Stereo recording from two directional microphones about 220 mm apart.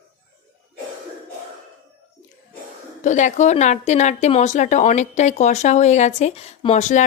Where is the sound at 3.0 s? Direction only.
35° left (ahead or behind).